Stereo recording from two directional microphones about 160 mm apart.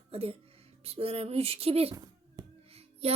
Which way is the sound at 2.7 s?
40° right (ahead or behind).